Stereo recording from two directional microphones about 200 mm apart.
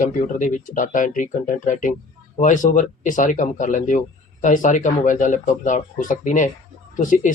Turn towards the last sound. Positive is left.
turn(degrees=40)  # may be behind; listen again after turning